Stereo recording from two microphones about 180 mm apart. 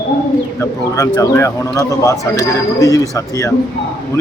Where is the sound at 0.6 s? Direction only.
15° left (ahead or behind).